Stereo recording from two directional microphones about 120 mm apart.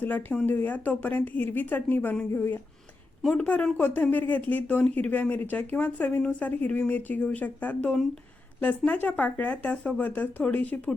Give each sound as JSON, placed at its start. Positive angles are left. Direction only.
{"t": 0.0, "sound": "speech", "side_deg": 15}